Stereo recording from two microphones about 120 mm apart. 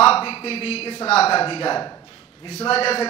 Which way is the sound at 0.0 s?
50° left (ahead or behind).